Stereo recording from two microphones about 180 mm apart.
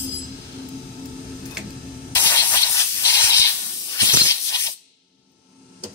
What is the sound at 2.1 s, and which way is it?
Hiss, 15° left (ahead or behind).